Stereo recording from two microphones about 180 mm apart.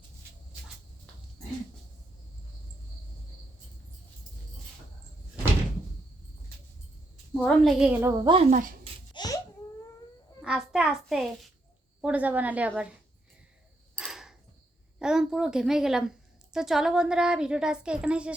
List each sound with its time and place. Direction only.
7.3 s a woman's voice: 5° left (ahead or behind)
8.2 s a woman's voice: 30° right (ahead or behind)
8.4 s speech: 45° right (ahead or behind)
9.1 s baby cry: 20° left (ahead or behind)
10.4 s a sound: 5° right (ahead or behind)
12.0 s a woman's voice: 10° right (ahead or behind)
13.9 s a sound: centre (ahead or behind)
14.9 s a woman's voice: 5° right (ahead or behind)